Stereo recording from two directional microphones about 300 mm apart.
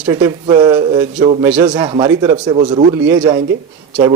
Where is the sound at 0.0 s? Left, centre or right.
Centre.